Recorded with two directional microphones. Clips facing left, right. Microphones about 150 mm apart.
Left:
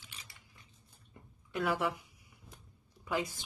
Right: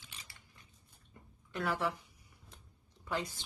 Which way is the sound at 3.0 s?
10° left (ahead or behind).